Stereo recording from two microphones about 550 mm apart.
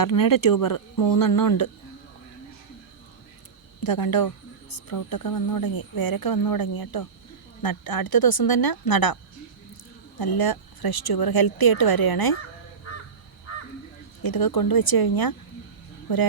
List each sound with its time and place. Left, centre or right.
0.0 s speech: left
3.8 s speech: left
10.2 s speech: left
14.2 s speech: left